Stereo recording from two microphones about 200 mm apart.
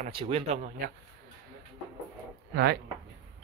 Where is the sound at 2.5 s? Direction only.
55° right (ahead or behind).